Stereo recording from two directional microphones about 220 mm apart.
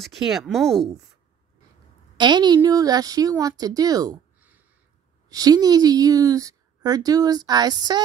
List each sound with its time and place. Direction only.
0.0 s speech: centre (ahead or behind)
2.1 s a woman's voice: 20° right (ahead or behind)